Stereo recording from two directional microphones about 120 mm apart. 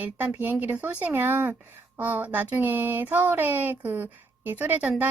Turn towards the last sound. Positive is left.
turn(degrees=-15)  # may be behind; listen again after turning